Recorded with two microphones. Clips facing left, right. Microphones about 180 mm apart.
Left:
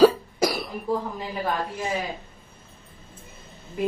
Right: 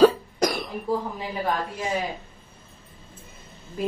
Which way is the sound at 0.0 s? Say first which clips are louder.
Even; 5° left (ahead or behind).